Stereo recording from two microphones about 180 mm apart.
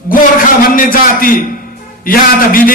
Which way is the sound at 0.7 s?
50° left (ahead or behind).